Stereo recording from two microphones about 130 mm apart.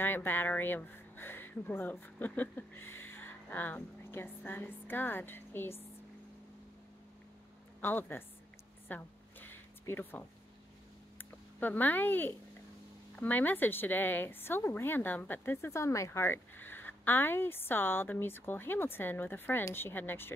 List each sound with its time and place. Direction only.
0.0 s speech: 15° left (ahead or behind)
7.8 s a woman's voice: 15° left (ahead or behind)
8.8 s a sound: 15° left (ahead or behind)
11.1 s a woman's voice: 15° left (ahead or behind)